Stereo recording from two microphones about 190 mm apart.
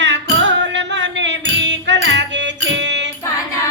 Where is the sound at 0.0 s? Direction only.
70° right (ahead or behind).